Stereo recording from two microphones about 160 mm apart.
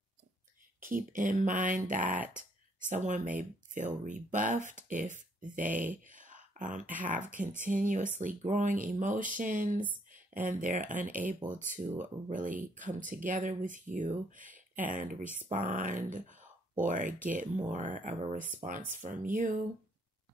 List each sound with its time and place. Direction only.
0.7 s speech: 60° right (ahead or behind)
5.7 s speech: 10° right (ahead or behind)
6.0 s a sound: 55° right (ahead or behind)
7.0 s speech: 55° right (ahead or behind)